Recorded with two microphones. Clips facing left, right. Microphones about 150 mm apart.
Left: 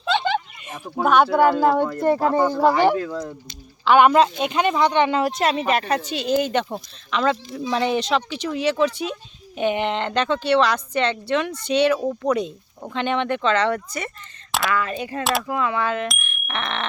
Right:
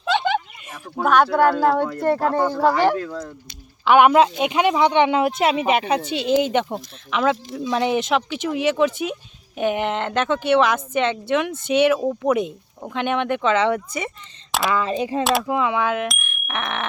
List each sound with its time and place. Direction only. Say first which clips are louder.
0.0 s a sound: right 1 dB; 10° right (ahead or behind)
0.9 s speech: even; 5° left (ahead or behind)
3.8 s a woman's voice: right 1 dB; 10° right (ahead or behind)
6.0 s speech: right 2 dB; 65° right (ahead or behind)
6.4 s a woman's voice: right 2 dB; 15° right (ahead or behind)
14.7 s speech: right 5 dB; 25° right (ahead or behind)
15.2 s speech: right 2 dB; centre (ahead or behind)
15.4 s a woman's voice: right 2 dB; 15° right (ahead or behind)